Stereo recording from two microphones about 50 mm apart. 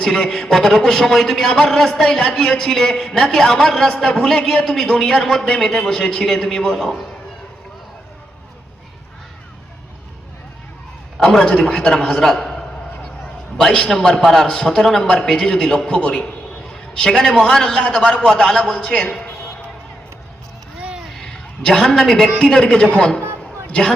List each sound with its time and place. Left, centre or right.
0.3 s a man's voice: centre
5.7 s a man's voice: centre
11.2 s a man's voice: centre
16.0 s a man's voice: left
21.2 s a sound: centre
22.4 s a man's voice: centre